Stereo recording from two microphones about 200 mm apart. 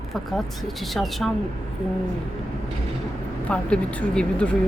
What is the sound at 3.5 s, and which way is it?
Speech, 5° left (ahead or behind).